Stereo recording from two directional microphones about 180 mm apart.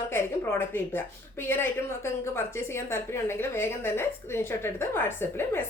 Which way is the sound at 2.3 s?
15° left (ahead or behind).